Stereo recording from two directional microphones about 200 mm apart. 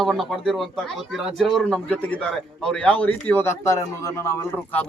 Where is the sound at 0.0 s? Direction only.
Centre (ahead or behind).